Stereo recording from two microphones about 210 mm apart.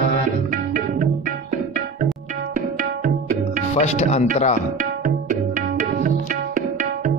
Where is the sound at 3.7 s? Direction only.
30° left (ahead or behind).